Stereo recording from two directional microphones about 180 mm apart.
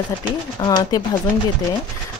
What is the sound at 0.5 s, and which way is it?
Speech, 25° left (ahead or behind).